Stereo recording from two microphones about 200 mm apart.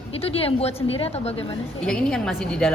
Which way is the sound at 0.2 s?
30° left (ahead or behind).